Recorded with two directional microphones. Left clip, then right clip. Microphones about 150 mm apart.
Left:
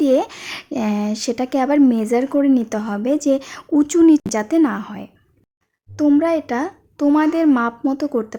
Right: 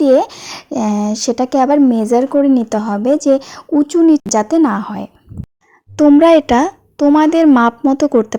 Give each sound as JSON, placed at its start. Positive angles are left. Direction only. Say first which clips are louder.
{"t": 0.0, "sound": "speech", "louder": "right 6 dB", "side_deg": -20}
{"t": 4.3, "sound": "speech", "louder": "right 5 dB", "side_deg": -25}
{"t": 6.1, "sound": "speech", "louder": "right 10 dB", "side_deg": -50}
{"t": 6.9, "sound": "speech", "louder": "right 6 dB", "side_deg": -30}